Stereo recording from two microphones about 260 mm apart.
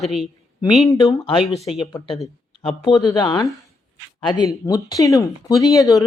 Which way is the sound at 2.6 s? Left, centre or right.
Left.